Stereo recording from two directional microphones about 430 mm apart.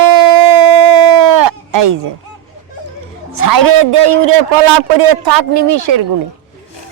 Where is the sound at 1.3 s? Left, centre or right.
Right.